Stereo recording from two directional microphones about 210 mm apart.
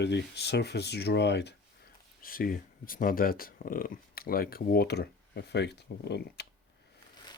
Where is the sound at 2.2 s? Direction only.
45° left (ahead or behind).